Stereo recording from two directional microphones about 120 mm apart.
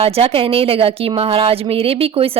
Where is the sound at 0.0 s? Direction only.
55° right (ahead or behind).